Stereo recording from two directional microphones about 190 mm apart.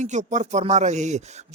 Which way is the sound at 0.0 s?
40° right (ahead or behind).